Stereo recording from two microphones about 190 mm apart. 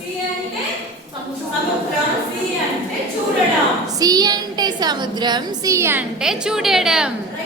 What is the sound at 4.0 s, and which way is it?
A woman's voice, 20° right (ahead or behind).